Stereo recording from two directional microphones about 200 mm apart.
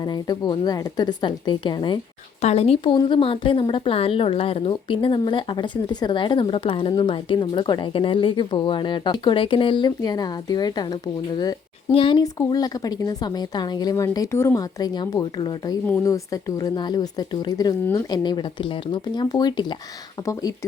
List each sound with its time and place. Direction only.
0.0 s a woman's voice: 20° left (ahead or behind)